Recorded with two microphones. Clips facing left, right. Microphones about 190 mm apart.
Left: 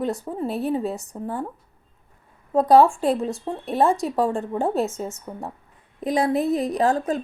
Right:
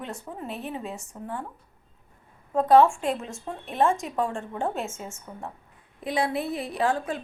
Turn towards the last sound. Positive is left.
turn(degrees=40)  # may be behind; listen again after turning